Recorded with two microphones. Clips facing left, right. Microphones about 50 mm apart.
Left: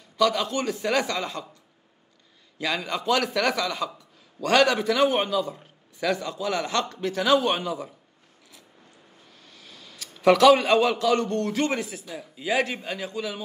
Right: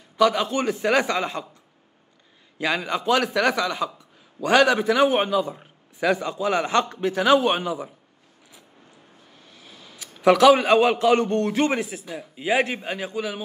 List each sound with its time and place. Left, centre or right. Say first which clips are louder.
0.2 s a man's voice: right 3 dB; right
2.6 s a man's voice: right 3 dB; centre
9.4 s a sound: right 1 dB; right
10.2 s a man's voice: right 1 dB; centre